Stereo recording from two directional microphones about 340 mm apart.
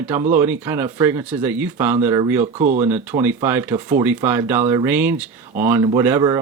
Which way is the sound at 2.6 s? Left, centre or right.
Right.